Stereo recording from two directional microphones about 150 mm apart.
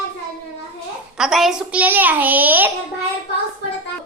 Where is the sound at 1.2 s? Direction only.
Centre (ahead or behind).